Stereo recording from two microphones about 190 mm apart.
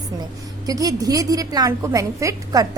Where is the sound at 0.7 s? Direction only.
20° right (ahead or behind).